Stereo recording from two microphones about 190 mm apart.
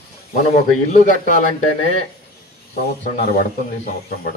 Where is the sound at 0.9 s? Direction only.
40° left (ahead or behind).